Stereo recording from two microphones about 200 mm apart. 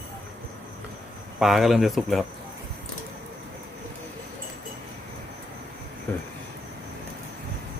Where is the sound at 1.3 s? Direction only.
Centre (ahead or behind).